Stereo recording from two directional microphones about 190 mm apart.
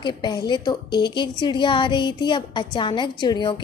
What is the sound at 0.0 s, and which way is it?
A woman's voice, 20° left (ahead or behind).